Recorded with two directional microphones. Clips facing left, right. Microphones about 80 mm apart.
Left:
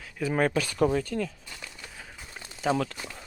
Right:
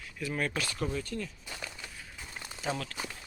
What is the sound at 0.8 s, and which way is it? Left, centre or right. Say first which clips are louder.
Speech: left 11 dB; left.